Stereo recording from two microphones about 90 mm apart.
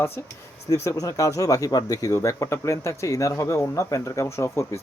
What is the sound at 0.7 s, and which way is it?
Speech, 35° left (ahead or behind).